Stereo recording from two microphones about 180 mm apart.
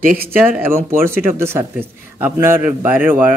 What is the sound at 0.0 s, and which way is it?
Speech, 50° right (ahead or behind).